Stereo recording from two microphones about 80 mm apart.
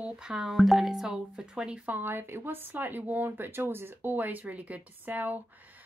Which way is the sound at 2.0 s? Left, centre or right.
Right.